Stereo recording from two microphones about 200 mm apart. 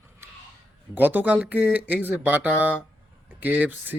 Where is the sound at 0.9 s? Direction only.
10° right (ahead or behind).